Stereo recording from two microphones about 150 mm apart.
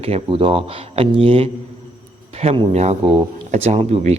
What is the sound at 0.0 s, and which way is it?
Speech, 40° right (ahead or behind).